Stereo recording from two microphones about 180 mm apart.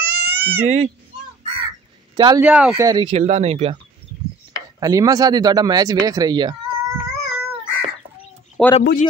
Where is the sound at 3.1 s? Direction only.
35° right (ahead or behind).